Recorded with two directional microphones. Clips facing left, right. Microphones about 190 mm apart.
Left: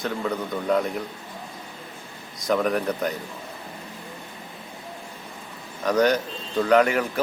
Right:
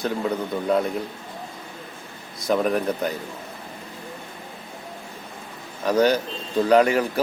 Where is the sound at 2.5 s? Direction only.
25° right (ahead or behind).